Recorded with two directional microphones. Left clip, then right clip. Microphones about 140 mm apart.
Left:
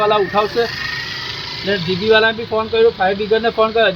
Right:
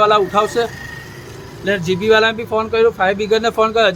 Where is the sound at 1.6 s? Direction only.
20° right (ahead or behind).